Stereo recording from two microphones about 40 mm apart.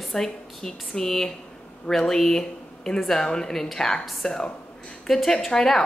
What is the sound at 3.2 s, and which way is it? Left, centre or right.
Speech, centre.